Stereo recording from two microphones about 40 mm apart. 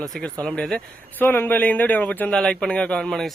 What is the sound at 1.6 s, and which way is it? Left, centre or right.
Speech, left.